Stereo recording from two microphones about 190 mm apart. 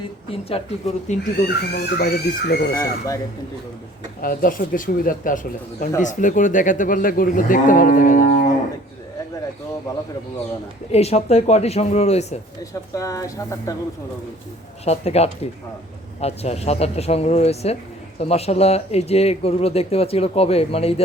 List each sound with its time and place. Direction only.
0.3 s speech: 30° left (ahead or behind)
1.5 s speech: 60° left (ahead or behind)
2.7 s speech: 15° left (ahead or behind)
4.2 s speech: 45° left (ahead or behind)
10.9 s speech: 35° left (ahead or behind)
12.9 s speech: 15° left (ahead or behind)
14.8 s speech: 35° left (ahead or behind)